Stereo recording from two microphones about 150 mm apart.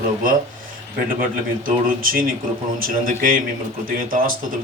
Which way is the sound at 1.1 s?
70° right (ahead or behind).